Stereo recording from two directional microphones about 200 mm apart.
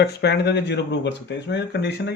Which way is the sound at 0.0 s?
55° left (ahead or behind).